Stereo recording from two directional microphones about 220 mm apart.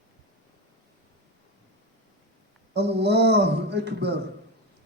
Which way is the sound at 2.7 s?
50° right (ahead or behind).